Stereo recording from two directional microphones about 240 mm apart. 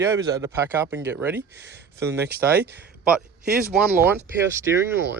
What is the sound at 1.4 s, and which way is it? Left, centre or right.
Speech, right.